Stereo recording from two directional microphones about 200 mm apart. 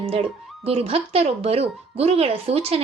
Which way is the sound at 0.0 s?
30° right (ahead or behind).